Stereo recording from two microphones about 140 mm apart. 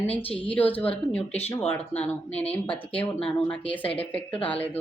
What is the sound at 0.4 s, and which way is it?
Speech, 10° left (ahead or behind).